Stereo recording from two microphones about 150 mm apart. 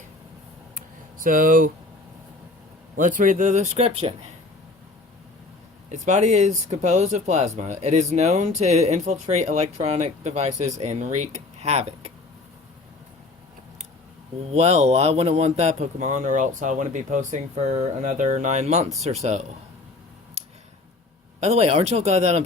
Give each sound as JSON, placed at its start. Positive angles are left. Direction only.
{"t": 1.2, "sound": "speech", "side_deg": -65}
{"t": 2.9, "sound": "speech", "side_deg": -65}
{"t": 5.9, "sound": "speech", "side_deg": -50}
{"t": 14.5, "sound": "speech", "side_deg": -45}
{"t": 21.4, "sound": "speech", "side_deg": -45}